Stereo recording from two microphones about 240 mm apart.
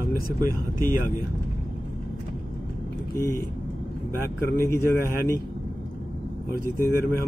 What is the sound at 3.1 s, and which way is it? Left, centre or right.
Speech, centre.